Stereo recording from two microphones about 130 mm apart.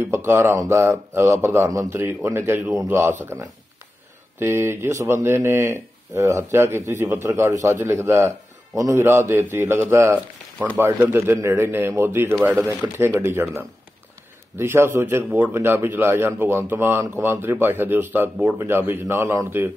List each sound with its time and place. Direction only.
0.1 s speech: 20° right (ahead or behind)
4.4 s a man's voice: 20° right (ahead or behind)